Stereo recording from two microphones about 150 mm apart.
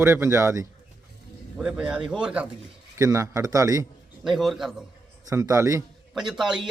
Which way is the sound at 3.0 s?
20° right (ahead or behind).